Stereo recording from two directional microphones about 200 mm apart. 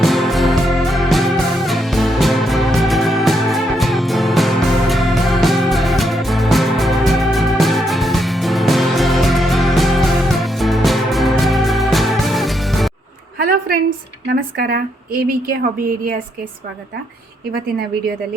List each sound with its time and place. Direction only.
0.0 s music: centre (ahead or behind)
13.4 s a sound: 50° right (ahead or behind)
14.3 s a woman's voice: 50° right (ahead or behind)